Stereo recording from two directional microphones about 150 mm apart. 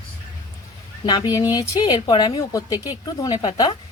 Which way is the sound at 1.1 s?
25° left (ahead or behind).